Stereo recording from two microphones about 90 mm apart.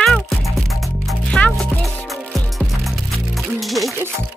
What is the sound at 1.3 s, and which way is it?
Music, 10° left (ahead or behind).